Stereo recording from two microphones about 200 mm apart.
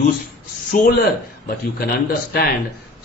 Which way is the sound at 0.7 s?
45° left (ahead or behind).